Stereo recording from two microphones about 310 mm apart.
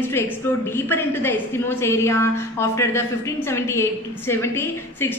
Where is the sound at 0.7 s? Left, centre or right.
Centre.